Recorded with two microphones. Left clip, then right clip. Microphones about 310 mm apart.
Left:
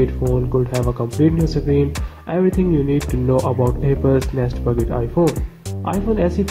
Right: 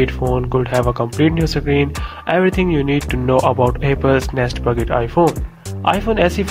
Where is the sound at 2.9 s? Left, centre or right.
Right.